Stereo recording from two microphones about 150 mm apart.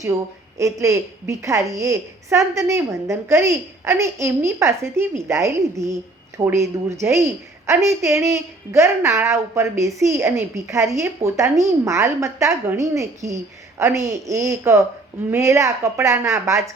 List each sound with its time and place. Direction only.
0.6 s a woman's voice: 20° right (ahead or behind)